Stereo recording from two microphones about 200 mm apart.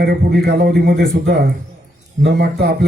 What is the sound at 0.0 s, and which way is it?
A man's voice, 55° right (ahead or behind).